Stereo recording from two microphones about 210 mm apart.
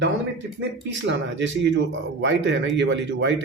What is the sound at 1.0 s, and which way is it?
Speech, 60° right (ahead or behind).